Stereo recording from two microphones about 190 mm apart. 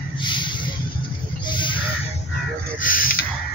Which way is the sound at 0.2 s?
25° left (ahead or behind).